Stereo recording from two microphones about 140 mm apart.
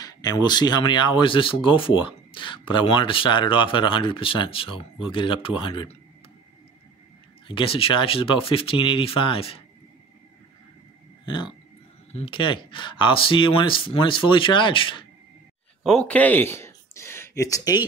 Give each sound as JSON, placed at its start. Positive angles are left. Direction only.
{"t": 0.0, "sound": "speech", "side_deg": 30}
{"t": 7.4, "sound": "speech", "side_deg": 40}
{"t": 11.2, "sound": "speech", "side_deg": 35}
{"t": 15.8, "sound": "speech", "side_deg": 5}